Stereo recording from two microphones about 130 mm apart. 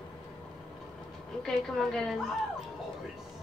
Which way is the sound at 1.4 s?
5° left (ahead or behind).